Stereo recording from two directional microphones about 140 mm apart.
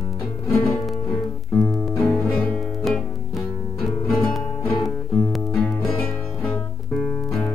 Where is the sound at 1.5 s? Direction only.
5° left (ahead or behind).